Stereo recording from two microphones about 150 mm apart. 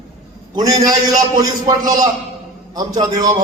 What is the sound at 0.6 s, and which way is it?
A man's voice, 25° right (ahead or behind).